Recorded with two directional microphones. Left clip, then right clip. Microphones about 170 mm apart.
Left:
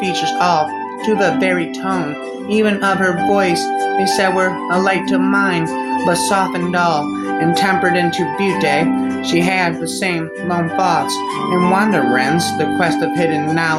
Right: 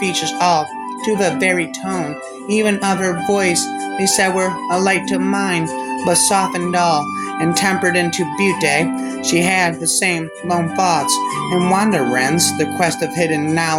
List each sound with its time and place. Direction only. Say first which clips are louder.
0.0 s speech: left 1 dB; 45° right (ahead or behind)